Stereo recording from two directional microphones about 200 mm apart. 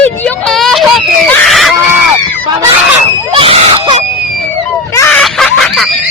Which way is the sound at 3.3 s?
30° right (ahead or behind).